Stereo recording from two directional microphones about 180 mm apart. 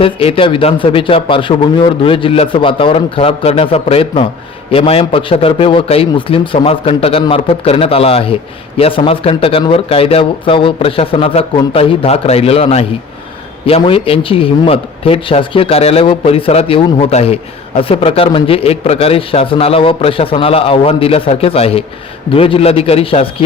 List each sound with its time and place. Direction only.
0.0 s a man's voice: 30° left (ahead or behind)